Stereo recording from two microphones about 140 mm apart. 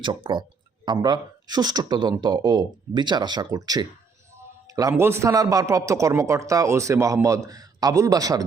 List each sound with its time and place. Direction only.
0.0 s a man's voice: 35° right (ahead or behind)